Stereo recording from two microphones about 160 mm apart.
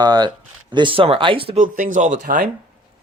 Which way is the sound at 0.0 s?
25° right (ahead or behind).